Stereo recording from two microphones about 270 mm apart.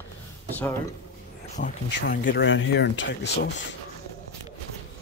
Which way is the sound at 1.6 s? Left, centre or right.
Left.